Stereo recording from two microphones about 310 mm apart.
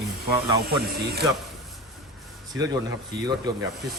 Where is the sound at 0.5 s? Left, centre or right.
Right.